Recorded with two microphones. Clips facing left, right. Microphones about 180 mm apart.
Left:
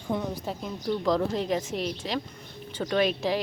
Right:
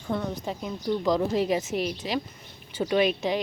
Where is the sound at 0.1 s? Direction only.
15° left (ahead or behind).